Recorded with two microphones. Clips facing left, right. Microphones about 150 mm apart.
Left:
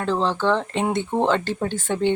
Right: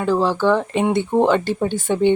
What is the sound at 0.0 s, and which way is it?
Speech, 10° right (ahead or behind).